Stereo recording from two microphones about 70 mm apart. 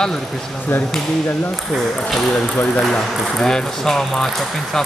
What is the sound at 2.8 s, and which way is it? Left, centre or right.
Speech, centre.